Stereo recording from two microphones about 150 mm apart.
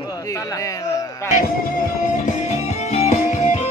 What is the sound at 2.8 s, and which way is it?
Music, 50° left (ahead or behind).